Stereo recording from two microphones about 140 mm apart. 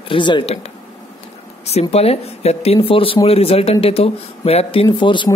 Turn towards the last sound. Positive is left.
turn(degrees=35)  # may be behind; listen again after turning